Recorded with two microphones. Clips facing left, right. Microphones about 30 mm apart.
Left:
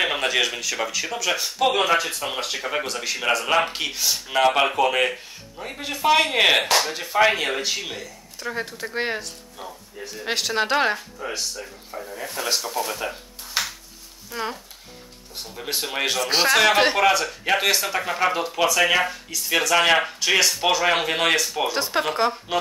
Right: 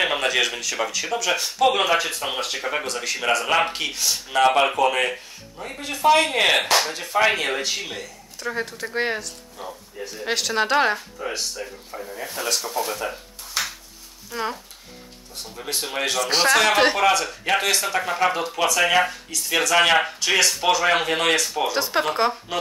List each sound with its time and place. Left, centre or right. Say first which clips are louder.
0.0 s speech: right 1 dB; centre
11.9 s speech: left 3 dB; centre
13.6 s music: left 1 dB; left
14.3 s speech: right 2 dB; centre